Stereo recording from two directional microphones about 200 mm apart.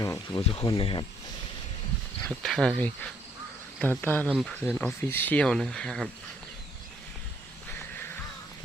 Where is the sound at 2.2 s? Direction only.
Centre (ahead or behind).